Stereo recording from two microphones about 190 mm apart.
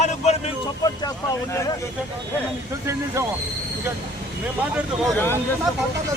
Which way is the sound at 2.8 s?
15° right (ahead or behind).